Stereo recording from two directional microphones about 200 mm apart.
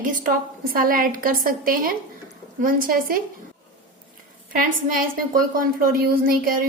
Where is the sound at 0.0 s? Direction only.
40° right (ahead or behind).